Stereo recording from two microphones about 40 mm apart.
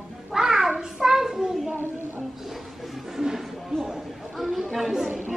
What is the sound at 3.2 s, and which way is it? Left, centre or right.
Music, centre.